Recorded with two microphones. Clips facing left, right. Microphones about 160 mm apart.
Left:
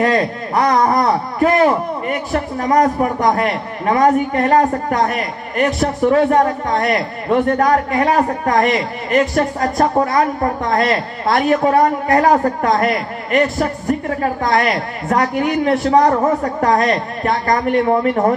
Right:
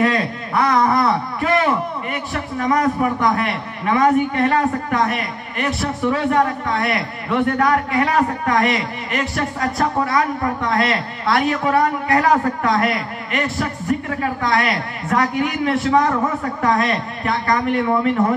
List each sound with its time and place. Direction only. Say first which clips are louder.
0.0 s a man's voice: left 3 dB; 40° left (ahead or behind)